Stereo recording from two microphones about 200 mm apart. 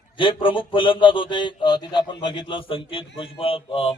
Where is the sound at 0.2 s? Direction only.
25° left (ahead or behind).